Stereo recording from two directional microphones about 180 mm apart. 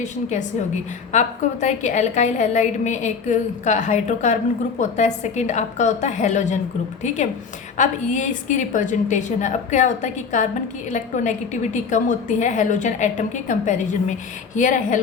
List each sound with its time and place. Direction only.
0.0 s a woman's voice: 40° left (ahead or behind)
7.8 s a woman's voice: 40° left (ahead or behind)